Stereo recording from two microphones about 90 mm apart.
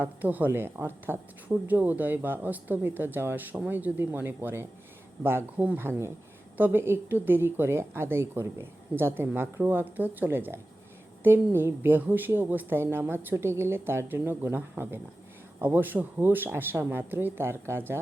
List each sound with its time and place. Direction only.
0.0 s a woman's voice: 20° right (ahead or behind)